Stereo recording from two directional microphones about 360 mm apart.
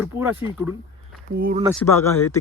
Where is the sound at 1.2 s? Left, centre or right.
Right.